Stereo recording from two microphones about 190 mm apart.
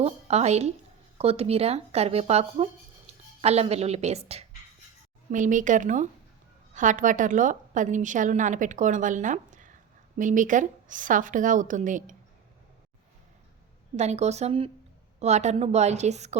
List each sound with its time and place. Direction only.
0.0 s a woman's voice: 35° right (ahead or behind)
13.9 s a woman's voice: 35° right (ahead or behind)